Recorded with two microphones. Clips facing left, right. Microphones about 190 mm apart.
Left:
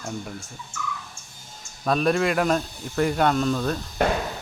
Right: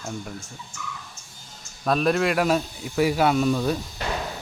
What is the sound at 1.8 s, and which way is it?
Speech, centre (ahead or behind).